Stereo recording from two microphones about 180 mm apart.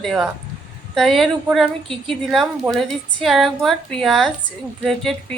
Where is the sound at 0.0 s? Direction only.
Centre (ahead or behind).